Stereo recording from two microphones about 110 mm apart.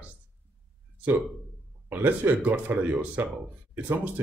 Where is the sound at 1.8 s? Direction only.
20° right (ahead or behind).